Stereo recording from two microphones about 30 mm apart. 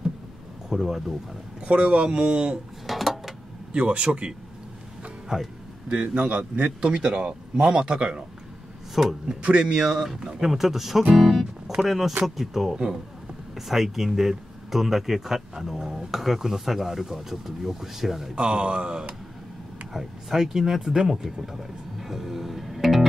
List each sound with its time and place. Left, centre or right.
0.7 s speech: centre
1.7 s a man's voice: right
2.9 s a sound: centre
3.7 s a man's voice: right
5.3 s speech: right
5.9 s a man's voice: right
9.0 s speech: centre
11.1 s music: centre
11.8 s speech: centre
12.7 s speech: right
13.6 s speech: centre
18.5 s a man's voice: right
19.9 s speech: centre
22.0 s music: centre